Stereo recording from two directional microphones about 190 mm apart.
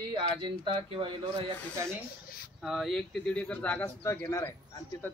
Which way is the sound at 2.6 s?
Centre (ahead or behind).